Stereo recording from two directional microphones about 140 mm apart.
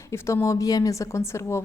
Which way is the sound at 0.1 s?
20° left (ahead or behind).